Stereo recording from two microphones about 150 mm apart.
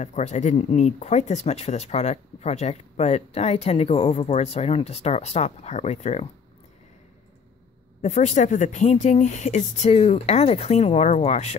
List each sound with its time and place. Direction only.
0.0 s speech: 50° left (ahead or behind)
8.0 s speech: 50° left (ahead or behind)